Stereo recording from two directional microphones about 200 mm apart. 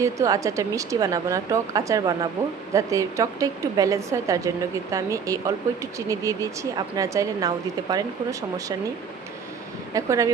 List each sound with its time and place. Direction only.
0.0 s a woman's voice: 15° right (ahead or behind)
9.9 s a woman's voice: 15° right (ahead or behind)